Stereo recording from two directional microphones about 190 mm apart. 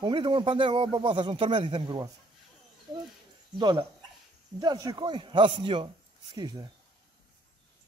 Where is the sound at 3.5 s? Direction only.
25° right (ahead or behind).